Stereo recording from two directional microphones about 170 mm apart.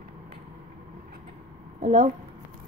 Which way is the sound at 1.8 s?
55° right (ahead or behind).